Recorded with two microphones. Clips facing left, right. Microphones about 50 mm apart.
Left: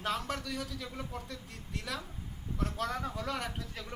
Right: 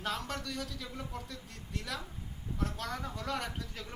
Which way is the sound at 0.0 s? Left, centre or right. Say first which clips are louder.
Left 2 dB; centre.